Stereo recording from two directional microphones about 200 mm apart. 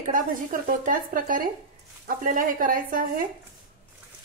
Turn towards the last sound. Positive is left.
turn(degrees=-45)  # may be behind; listen again after turning